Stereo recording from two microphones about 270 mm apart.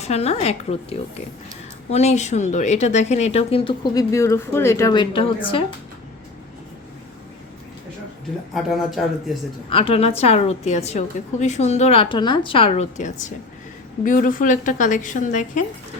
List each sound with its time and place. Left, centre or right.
0.0 s a woman's voice: left
8.5 s speech: centre
9.6 s a woman's voice: centre